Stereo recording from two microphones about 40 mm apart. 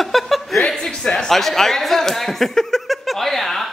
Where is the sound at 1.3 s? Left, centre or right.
Centre.